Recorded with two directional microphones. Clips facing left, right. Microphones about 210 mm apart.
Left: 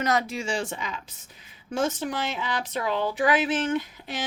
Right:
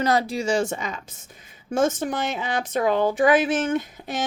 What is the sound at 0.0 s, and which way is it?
Speech, 35° right (ahead or behind).